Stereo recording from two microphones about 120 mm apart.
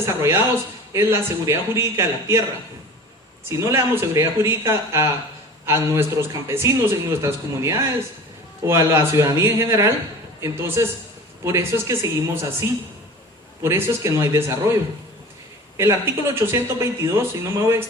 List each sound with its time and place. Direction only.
0.0 s speech: 25° right (ahead or behind)
3.5 s speech: 25° right (ahead or behind)
15.8 s speech: 20° right (ahead or behind)